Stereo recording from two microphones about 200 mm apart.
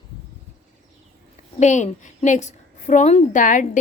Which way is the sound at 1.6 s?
35° left (ahead or behind).